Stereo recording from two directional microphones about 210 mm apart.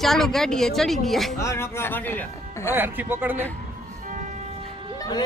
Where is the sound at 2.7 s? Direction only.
10° right (ahead or behind).